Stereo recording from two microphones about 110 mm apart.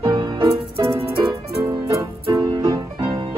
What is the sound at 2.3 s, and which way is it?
Music, 35° right (ahead or behind).